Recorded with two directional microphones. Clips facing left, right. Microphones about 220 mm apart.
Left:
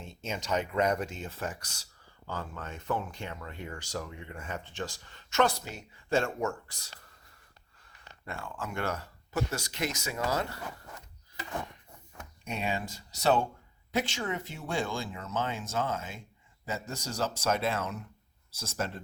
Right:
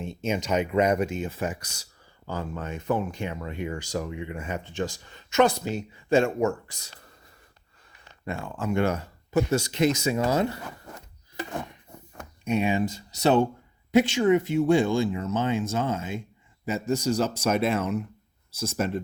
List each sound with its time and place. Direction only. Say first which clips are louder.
0.0 s speech: right 9 dB; 15° right (ahead or behind)
8.2 s speech: right 8 dB; 20° right (ahead or behind)
12.5 s speech: right 10 dB; 15° right (ahead or behind)